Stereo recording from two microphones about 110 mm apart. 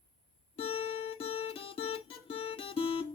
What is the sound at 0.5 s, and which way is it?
Music, 60° left (ahead or behind).